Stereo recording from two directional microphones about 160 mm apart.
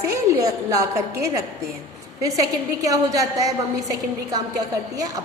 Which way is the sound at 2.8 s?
20° right (ahead or behind).